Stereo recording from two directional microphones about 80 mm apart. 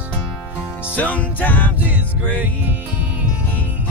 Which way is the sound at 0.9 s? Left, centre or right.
Centre.